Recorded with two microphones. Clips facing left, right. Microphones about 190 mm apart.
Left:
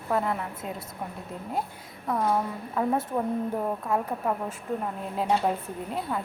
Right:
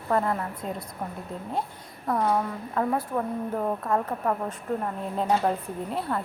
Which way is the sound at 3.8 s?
10° left (ahead or behind).